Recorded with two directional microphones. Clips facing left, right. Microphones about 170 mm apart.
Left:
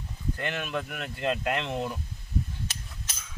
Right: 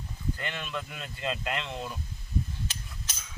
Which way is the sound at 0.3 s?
60° left (ahead or behind).